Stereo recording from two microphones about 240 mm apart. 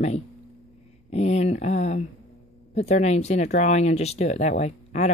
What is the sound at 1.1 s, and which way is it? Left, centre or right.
Speech, left.